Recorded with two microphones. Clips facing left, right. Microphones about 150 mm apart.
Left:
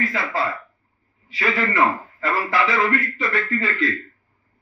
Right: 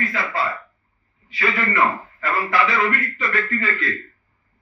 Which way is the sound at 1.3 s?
30° left (ahead or behind).